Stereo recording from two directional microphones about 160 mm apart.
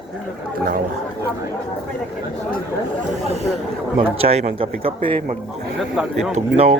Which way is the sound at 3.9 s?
35° right (ahead or behind).